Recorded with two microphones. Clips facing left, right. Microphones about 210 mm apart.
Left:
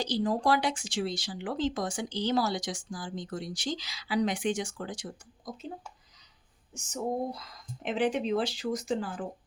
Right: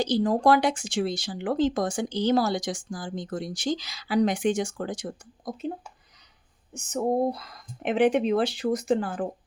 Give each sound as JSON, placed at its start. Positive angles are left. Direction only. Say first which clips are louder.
{"t": 0.0, "sound": "speech", "louder": "right 6 dB", "side_deg": -50}
{"t": 6.7, "sound": "speech", "louder": "right 7 dB", "side_deg": -60}